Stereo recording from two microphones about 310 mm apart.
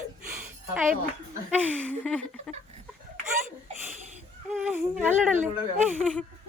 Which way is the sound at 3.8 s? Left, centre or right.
Right.